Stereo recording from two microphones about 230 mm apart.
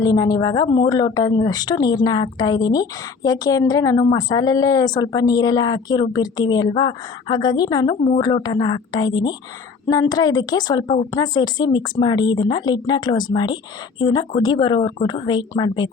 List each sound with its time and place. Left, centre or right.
0.0 s a woman's voice: centre